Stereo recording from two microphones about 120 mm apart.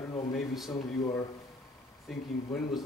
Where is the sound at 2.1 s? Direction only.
Centre (ahead or behind).